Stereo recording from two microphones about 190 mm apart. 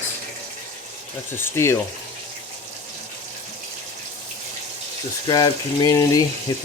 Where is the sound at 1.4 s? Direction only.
15° left (ahead or behind).